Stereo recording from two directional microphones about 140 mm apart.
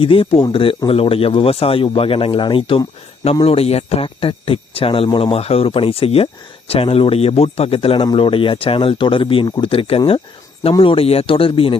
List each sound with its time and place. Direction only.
0.0 s speech: 40° left (ahead or behind)